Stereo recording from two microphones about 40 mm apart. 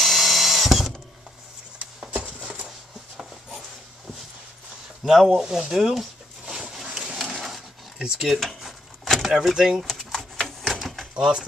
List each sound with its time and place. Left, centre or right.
0.0 s drill: centre
2.0 s a sound: right
5.0 s speech: centre
6.7 s a sound: centre
8.3 s dishes: centre
9.3 s speech: centre
9.8 s typewriter: centre
11.1 s speech: centre